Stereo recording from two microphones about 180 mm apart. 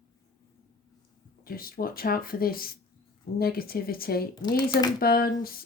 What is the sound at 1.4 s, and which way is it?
Speech, 55° left (ahead or behind).